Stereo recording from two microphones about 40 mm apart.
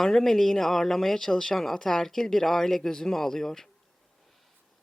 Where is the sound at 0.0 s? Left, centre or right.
Centre.